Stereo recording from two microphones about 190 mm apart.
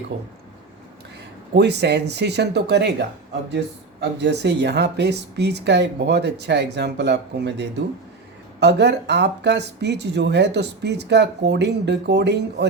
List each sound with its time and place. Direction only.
0.1 s speech: 60° right (ahead or behind)
1.5 s speech: 65° right (ahead or behind)
4.2 s speech: 65° right (ahead or behind)